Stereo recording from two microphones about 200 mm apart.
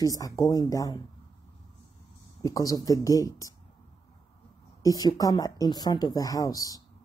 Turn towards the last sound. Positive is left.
turn(degrees=15)  # may be behind; listen again after turning